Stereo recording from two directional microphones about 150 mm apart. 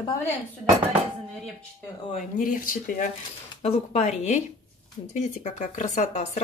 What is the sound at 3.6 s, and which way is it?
Speech, 45° left (ahead or behind).